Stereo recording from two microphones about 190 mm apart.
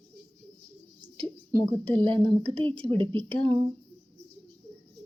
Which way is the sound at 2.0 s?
25° right (ahead or behind).